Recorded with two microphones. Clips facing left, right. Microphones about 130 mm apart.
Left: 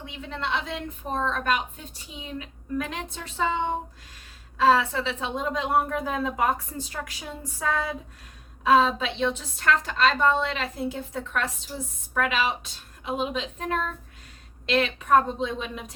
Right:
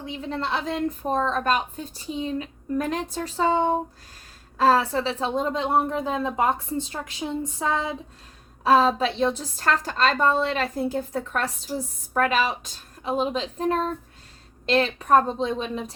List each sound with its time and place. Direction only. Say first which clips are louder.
0.0 s a woman's voice: right 4 dB; 35° right (ahead or behind)
8.6 s a woman's voice: right 2 dB; 35° right (ahead or behind)